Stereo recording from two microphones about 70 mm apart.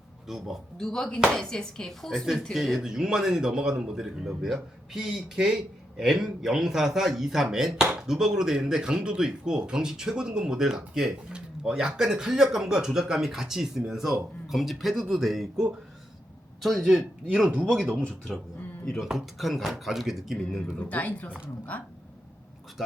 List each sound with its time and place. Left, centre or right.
0.3 s speech: centre
0.8 s speech: centre
2.8 s speech: centre
20.7 s speech: left